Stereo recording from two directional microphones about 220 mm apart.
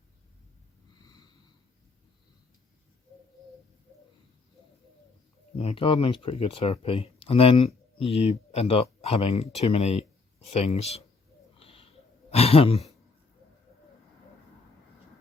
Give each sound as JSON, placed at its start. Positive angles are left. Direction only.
{"t": 1.0, "sound": "snort", "side_deg": 20}
{"t": 5.5, "sound": "speech", "side_deg": 25}
{"t": 11.5, "sound": "snort", "side_deg": 25}
{"t": 12.3, "sound": "speech", "side_deg": 25}